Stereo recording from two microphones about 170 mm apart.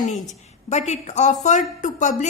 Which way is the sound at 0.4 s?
40° left (ahead or behind).